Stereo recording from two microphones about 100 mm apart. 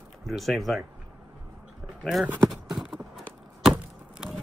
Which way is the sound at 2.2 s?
20° right (ahead or behind).